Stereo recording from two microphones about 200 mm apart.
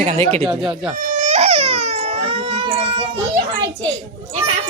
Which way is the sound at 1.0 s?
35° right (ahead or behind).